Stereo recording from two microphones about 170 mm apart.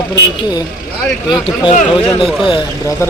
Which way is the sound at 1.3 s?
25° left (ahead or behind).